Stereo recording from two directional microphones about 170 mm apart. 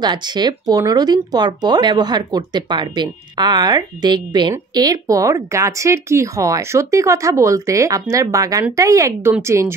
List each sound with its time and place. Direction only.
0.0 s speech: 25° right (ahead or behind)